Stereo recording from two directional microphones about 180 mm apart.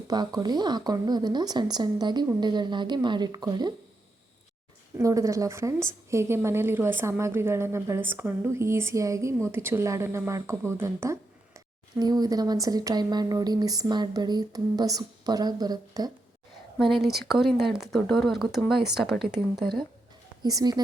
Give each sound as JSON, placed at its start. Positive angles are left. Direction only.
{"t": 0.1, "sound": "speech", "side_deg": -20}
{"t": 4.9, "sound": "a woman's voice", "side_deg": -20}
{"t": 16.8, "sound": "speech", "side_deg": 0}
{"t": 20.4, "sound": "speech", "side_deg": -20}